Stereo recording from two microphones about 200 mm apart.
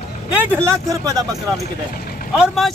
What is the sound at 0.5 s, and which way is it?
Speech, 15° right (ahead or behind).